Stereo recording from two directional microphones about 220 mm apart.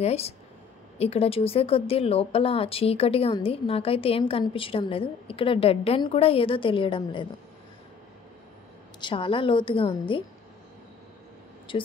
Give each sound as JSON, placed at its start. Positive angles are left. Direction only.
{"t": 0.0, "sound": "speech", "side_deg": 30}
{"t": 9.0, "sound": "speech", "side_deg": 25}
{"t": 11.7, "sound": "speech", "side_deg": 20}